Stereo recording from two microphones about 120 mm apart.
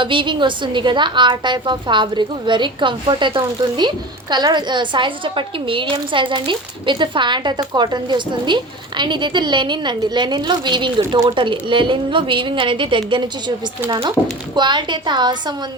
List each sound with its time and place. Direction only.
0.0 s a woman's voice: 45° right (ahead or behind)
14.5 s a woman's voice: 40° right (ahead or behind)